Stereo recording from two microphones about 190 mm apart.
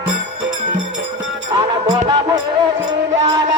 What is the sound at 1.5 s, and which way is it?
Music, 20° right (ahead or behind).